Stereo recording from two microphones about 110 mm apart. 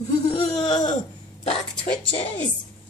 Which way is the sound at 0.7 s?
40° left (ahead or behind).